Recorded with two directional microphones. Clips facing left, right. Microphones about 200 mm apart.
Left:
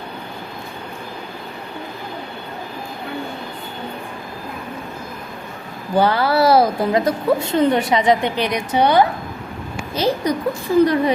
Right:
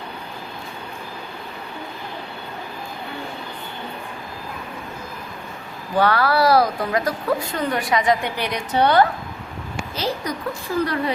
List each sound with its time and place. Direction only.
6.0 s a woman's voice: 25° left (ahead or behind)